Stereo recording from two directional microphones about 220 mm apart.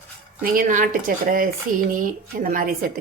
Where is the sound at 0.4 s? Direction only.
40° right (ahead or behind).